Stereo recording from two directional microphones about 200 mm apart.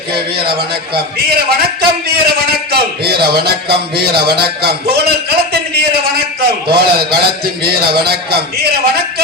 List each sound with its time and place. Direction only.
0.3 s a man's voice: 50° right (ahead or behind)